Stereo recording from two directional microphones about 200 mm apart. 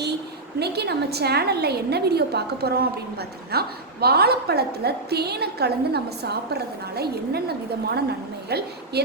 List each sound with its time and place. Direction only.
0.6 s a woman's voice: 55° right (ahead or behind)